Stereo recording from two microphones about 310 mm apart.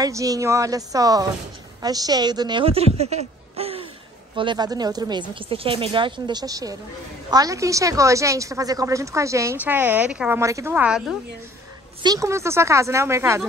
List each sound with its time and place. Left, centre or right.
0.0 s a woman's voice: centre